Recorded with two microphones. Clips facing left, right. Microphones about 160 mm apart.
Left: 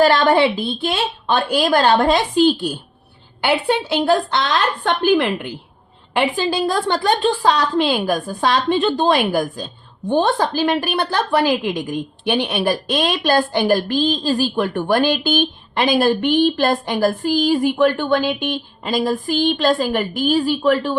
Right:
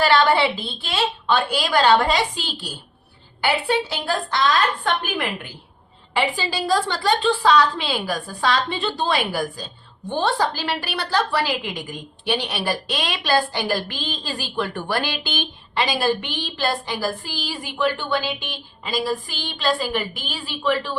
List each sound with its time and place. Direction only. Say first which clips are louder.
0.0 s a woman's voice: left 4 dB; 45° left (ahead or behind); by 5.5 s 70° left (ahead or behind)
6.1 s a woman's voice: left 5 dB; 55° left (ahead or behind)